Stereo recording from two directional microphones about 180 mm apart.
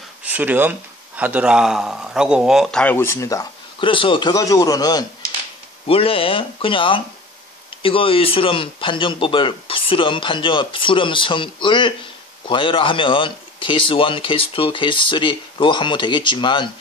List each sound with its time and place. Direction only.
0.2 s speech: 10° right (ahead or behind); by 5.0 s 20° left (ahead or behind)
5.9 s speech: 30° left (ahead or behind)